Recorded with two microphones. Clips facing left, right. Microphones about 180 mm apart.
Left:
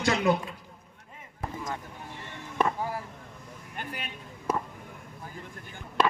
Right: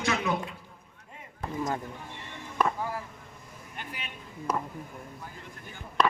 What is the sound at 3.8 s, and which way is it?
Speech, 50° left (ahead or behind).